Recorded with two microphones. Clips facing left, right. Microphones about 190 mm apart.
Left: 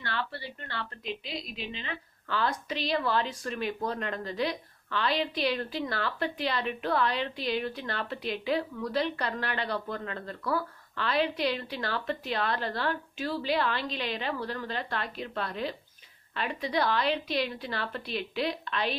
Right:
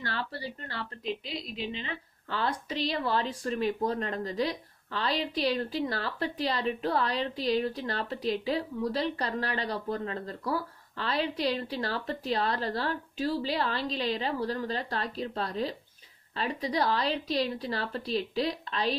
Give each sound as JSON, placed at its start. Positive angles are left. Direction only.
{"t": 0.0, "sound": "a woman's voice", "side_deg": -40}